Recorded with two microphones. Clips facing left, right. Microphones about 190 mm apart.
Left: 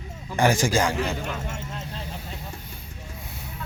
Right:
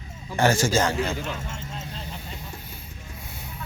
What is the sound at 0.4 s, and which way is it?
Speech, 15° left (ahead or behind).